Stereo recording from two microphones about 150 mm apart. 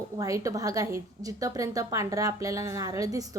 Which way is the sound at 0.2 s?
20° right (ahead or behind).